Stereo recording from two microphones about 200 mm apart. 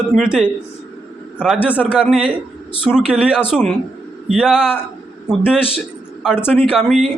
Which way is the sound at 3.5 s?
5° left (ahead or behind).